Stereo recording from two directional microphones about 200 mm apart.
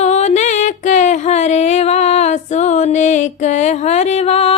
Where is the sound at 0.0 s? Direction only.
35° left (ahead or behind).